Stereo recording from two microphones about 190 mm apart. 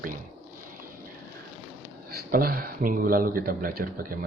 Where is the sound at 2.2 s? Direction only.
50° right (ahead or behind).